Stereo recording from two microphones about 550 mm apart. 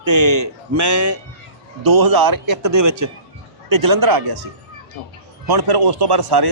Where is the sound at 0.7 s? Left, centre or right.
Right.